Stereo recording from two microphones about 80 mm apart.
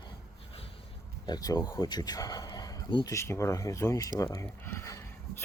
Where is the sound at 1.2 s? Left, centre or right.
Left.